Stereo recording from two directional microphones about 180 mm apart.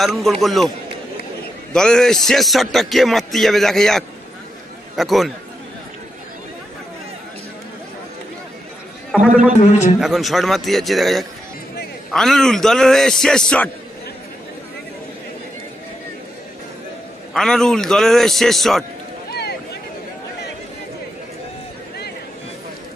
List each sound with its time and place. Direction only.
0.0 s a man's voice: centre (ahead or behind)
1.7 s a man's voice: 5° left (ahead or behind)
9.1 s a man's voice: 5° right (ahead or behind)
17.3 s a man's voice: 5° left (ahead or behind)
19.3 s a sound: 65° left (ahead or behind)